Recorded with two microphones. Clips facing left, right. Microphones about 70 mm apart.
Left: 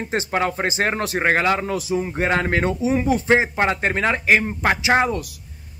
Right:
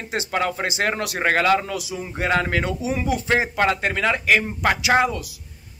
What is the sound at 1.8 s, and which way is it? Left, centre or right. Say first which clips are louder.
A man's voice: left 5 dB; left.